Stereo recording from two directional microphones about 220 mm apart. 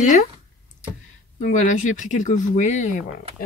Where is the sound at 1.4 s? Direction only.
35° left (ahead or behind).